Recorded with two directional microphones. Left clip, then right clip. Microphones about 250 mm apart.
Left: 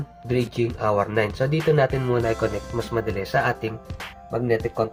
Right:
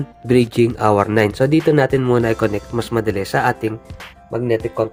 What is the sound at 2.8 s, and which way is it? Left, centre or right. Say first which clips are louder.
Speech: right 6 dB; right.